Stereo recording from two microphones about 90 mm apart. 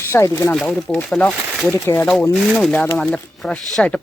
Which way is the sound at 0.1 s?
30° left (ahead or behind).